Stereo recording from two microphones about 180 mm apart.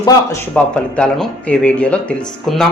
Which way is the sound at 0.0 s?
20° left (ahead or behind).